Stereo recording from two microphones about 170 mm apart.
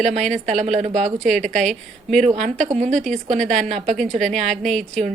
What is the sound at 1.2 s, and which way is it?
Speech, centre (ahead or behind).